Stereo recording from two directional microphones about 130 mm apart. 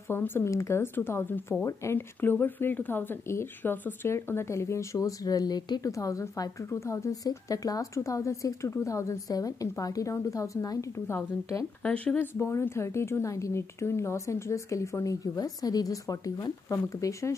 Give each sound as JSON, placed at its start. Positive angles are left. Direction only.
{"t": 0.1, "sound": "speech", "side_deg": 15}
{"t": 11.8, "sound": "speech", "side_deg": 10}